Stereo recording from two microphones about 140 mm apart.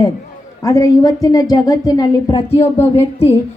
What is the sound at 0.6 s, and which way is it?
A woman's voice, 25° left (ahead or behind).